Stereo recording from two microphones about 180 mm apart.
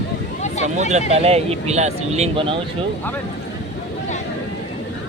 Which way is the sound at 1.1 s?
35° right (ahead or behind).